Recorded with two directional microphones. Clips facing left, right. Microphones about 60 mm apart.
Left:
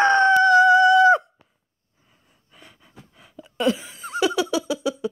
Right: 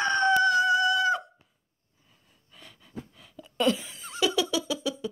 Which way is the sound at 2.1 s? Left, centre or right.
Left.